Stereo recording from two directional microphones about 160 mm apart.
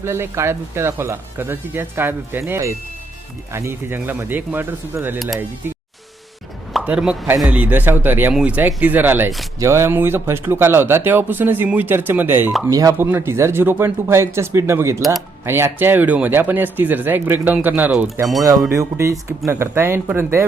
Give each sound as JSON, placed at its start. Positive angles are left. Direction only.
{"t": 0.0, "sound": "speech", "side_deg": -15}
{"t": 5.6, "sound": "music", "side_deg": -10}
{"t": 6.7, "sound": "speech", "side_deg": -5}
{"t": 18.7, "sound": "speech", "side_deg": -20}